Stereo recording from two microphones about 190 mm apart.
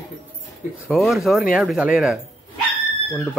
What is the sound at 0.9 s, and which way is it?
Speech, centre (ahead or behind).